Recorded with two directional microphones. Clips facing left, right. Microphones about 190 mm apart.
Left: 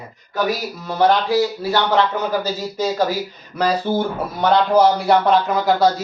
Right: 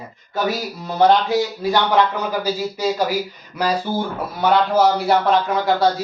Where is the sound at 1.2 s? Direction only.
20° right (ahead or behind).